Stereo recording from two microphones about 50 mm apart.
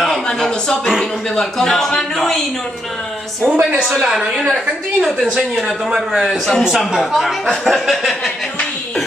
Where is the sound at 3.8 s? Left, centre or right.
Centre.